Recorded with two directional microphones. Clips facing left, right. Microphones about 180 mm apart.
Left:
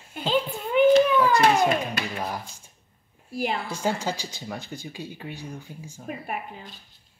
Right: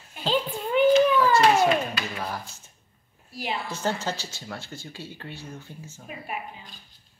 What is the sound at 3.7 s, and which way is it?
Speech, 10° left (ahead or behind).